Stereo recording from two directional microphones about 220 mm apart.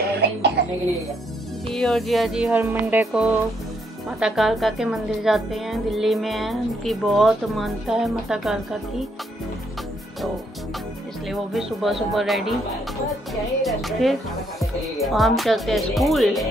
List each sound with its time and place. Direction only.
0.0 s cough: 50° right (ahead or behind)
1.7 s speech: centre (ahead or behind)
11.2 s speech: centre (ahead or behind)